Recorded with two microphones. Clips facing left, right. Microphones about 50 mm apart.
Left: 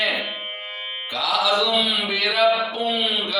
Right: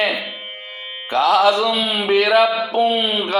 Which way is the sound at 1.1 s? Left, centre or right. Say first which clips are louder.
Right 7 dB; right.